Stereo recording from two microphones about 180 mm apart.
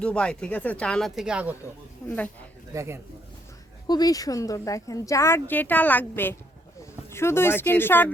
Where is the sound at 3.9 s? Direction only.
20° left (ahead or behind).